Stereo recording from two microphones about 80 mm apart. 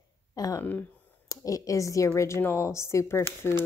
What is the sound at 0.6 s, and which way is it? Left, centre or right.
Speech, left.